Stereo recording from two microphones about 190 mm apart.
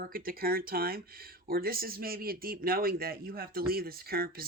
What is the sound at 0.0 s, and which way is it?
Speech, 50° right (ahead or behind).